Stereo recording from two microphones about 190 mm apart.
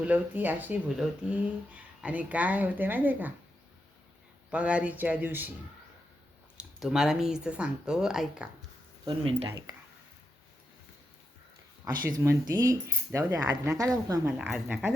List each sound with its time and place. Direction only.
0.0 s speech: 10° right (ahead or behind)
4.5 s speech: 5° right (ahead or behind)
6.6 s speech: centre (ahead or behind)
9.0 s speech: 30° right (ahead or behind)
9.5 s speech: 15° right (ahead or behind)
12.0 s speech: 15° right (ahead or behind)